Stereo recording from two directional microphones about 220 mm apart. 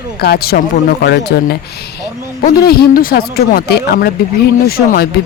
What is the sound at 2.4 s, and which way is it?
Speech, 45° left (ahead or behind).